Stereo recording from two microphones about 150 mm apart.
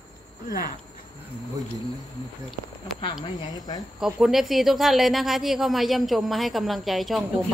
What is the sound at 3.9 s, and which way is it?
Speech, 5° right (ahead or behind).